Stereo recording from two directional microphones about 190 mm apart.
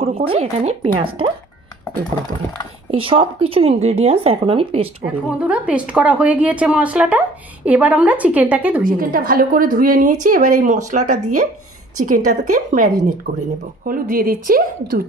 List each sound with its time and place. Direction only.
0.0 s speech: 30° right (ahead or behind)
2.9 s speech: 30° right (ahead or behind)
5.0 s a woman's voice: 5° right (ahead or behind)
8.8 s a woman's voice: 50° right (ahead or behind)
13.3 s speech: 60° right (ahead or behind)
13.8 s a woman's voice: 45° right (ahead or behind)